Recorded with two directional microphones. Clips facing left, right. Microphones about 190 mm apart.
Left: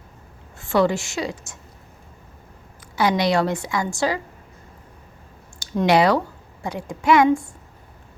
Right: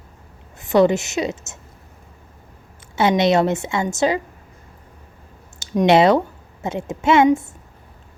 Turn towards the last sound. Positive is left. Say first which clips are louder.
# right 2 dB
turn(degrees=-25)  # may be behind; listen again after turning